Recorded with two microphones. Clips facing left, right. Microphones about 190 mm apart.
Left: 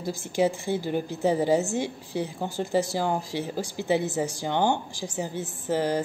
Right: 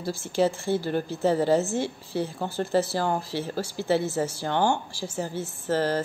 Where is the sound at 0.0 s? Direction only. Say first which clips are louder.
Even; 15° left (ahead or behind).